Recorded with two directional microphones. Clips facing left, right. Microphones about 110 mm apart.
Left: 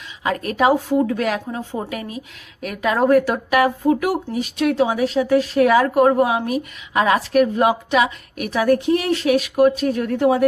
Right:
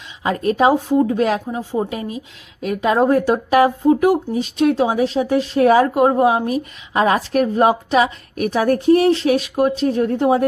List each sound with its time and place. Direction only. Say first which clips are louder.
0.2 s a woman's voice: right 3 dB; 25° right (ahead or behind)
1.5 s a woman's voice: right 4 dB; 15° right (ahead or behind)